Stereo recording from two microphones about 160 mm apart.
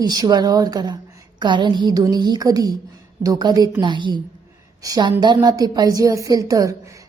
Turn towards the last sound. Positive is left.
turn(degrees=-20)  # may be behind; listen again after turning